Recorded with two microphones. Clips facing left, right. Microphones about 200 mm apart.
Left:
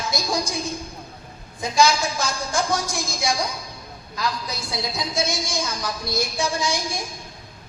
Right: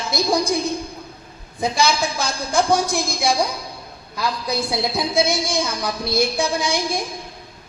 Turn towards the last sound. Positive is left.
turn(degrees=-60)  # may be behind; listen again after turning